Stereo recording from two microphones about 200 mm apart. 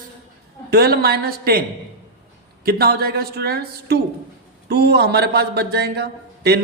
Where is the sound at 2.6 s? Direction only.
50° right (ahead or behind).